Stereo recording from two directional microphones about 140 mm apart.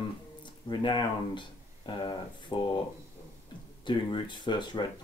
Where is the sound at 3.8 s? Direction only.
35° left (ahead or behind).